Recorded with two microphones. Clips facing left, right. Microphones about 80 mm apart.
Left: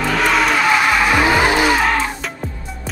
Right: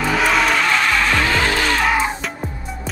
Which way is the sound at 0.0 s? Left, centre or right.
Centre.